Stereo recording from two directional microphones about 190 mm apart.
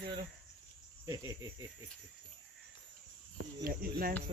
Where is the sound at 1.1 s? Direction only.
15° right (ahead or behind).